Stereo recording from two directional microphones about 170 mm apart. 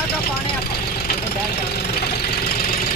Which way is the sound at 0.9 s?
70° left (ahead or behind).